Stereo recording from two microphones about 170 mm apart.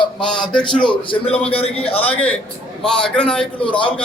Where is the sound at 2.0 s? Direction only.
10° left (ahead or behind).